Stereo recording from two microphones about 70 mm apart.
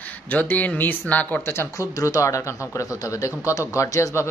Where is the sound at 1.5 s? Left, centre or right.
Left.